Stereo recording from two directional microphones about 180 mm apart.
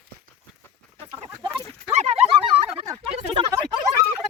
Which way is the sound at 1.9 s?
35° right (ahead or behind).